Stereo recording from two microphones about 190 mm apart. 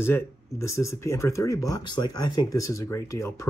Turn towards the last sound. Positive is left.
turn(degrees=15)  # may be behind; listen again after turning